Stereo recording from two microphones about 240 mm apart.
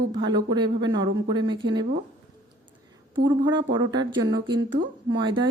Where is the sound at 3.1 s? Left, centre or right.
Centre.